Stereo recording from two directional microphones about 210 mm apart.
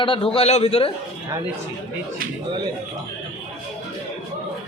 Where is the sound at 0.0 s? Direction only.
25° left (ahead or behind).